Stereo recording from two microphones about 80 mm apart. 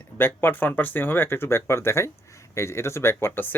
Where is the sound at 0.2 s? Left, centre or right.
Left.